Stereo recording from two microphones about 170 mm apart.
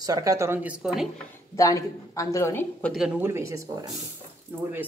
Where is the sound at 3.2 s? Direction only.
15° right (ahead or behind).